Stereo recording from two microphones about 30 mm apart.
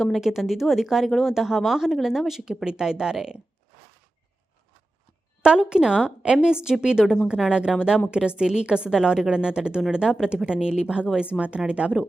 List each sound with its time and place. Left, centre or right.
0.2 s speech: centre
5.4 s a woman's voice: right
8.4 s speech: right
11.2 s a woman's voice: right